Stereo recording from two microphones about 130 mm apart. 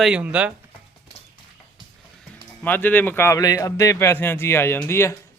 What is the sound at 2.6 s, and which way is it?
A man's voice, 15° left (ahead or behind).